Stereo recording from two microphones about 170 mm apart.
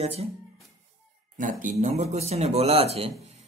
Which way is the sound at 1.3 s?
50° right (ahead or behind).